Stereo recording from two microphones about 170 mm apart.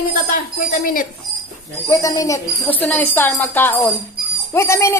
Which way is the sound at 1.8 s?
20° left (ahead or behind).